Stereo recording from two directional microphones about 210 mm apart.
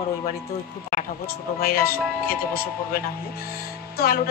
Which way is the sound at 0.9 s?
45° left (ahead or behind).